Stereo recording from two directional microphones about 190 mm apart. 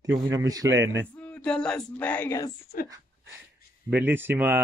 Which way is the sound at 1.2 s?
5° left (ahead or behind).